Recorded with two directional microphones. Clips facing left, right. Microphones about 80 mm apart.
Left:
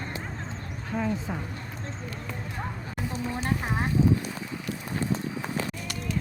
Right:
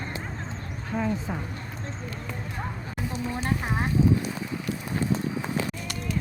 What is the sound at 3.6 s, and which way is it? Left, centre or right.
Speech, centre.